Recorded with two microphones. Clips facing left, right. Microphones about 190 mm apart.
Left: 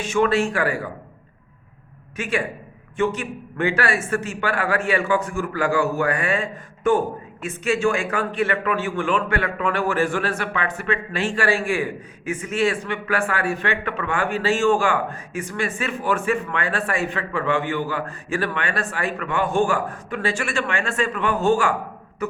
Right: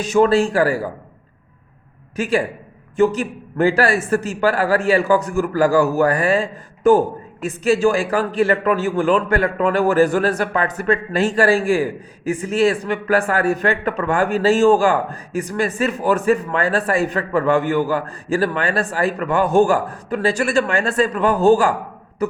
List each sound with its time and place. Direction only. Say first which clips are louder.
0.0 s a man's voice: right 5 dB; 35° right (ahead or behind)
2.1 s a man's voice: right 6 dB; 35° right (ahead or behind)
22.2 s hiccup: right 5 dB; 35° right (ahead or behind)